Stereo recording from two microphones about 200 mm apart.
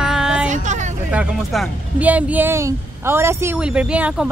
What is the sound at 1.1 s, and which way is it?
Speech, 5° right (ahead or behind).